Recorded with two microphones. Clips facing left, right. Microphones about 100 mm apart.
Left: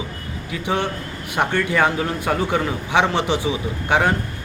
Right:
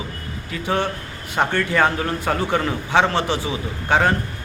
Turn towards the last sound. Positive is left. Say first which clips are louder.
# even
turn(degrees=15)  # may be behind; listen again after turning